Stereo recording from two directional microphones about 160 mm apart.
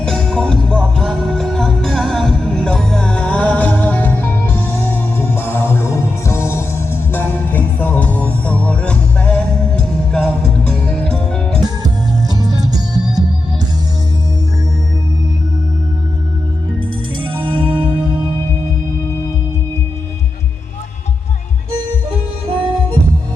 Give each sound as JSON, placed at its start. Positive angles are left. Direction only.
{"t": 0.0, "sound": "music", "side_deg": 0}
{"t": 12.3, "sound": "music", "side_deg": -25}
{"t": 17.2, "sound": "music", "side_deg": -30}
{"t": 22.4, "sound": "music", "side_deg": -30}